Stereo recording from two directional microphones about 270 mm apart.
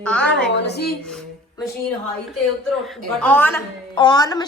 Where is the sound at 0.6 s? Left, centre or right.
Left.